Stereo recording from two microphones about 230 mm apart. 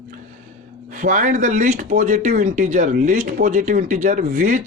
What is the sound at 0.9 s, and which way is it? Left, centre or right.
Speech, right.